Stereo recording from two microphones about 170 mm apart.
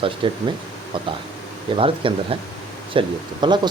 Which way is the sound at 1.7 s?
35° right (ahead or behind).